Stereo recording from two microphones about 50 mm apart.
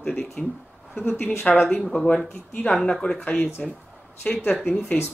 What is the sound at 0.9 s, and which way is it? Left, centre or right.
Speech, left.